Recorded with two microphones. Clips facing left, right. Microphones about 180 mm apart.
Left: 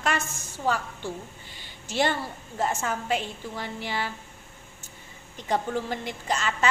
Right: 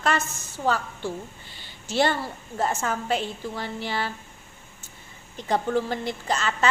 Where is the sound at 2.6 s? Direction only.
35° right (ahead or behind).